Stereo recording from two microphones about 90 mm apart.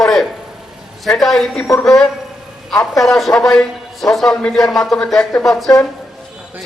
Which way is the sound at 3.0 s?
Centre (ahead or behind).